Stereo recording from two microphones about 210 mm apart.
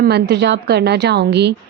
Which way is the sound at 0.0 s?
50° right (ahead or behind).